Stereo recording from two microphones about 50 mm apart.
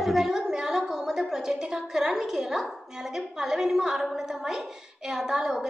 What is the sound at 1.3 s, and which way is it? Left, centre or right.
A woman's voice, centre.